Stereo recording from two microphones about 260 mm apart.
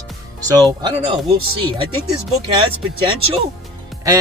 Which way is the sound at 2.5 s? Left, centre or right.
Centre.